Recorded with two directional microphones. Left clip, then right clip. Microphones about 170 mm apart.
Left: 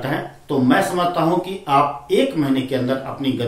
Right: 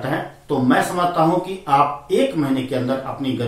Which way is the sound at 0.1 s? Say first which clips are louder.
Right 1 dB; 15° left (ahead or behind).